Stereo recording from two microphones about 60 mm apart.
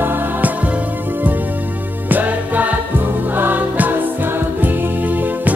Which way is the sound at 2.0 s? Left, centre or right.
Right.